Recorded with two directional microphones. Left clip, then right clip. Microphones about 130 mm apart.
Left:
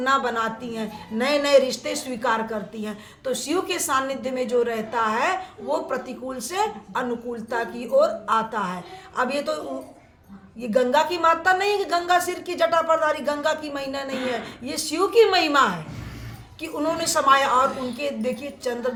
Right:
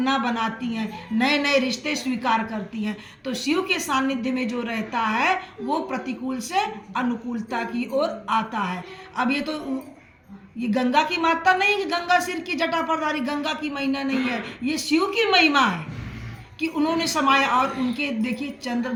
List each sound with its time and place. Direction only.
0.0 s a woman's voice: 45° left (ahead or behind)
10.6 s speech: 40° left (ahead or behind)